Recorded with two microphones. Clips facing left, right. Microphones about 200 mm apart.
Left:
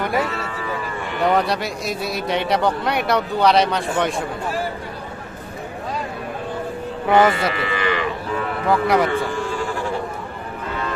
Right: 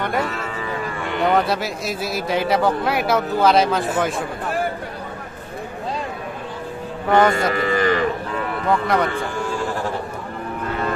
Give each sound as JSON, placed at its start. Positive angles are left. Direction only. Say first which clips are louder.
{"t": 1.2, "sound": "a man's voice", "louder": "even", "side_deg": 0}
{"t": 7.1, "sound": "a man's voice", "louder": "even", "side_deg": 5}
{"t": 7.3, "sound": "speech", "louder": "right 3 dB", "side_deg": -45}
{"t": 8.6, "sound": "a man's voice", "louder": "left 2 dB", "side_deg": 0}